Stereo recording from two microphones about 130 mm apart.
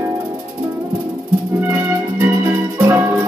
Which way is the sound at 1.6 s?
15° right (ahead or behind).